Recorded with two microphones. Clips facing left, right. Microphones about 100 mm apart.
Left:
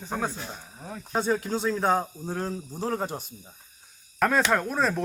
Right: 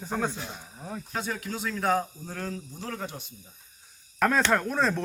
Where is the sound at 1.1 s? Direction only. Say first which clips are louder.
Left 8 dB; 30° left (ahead or behind).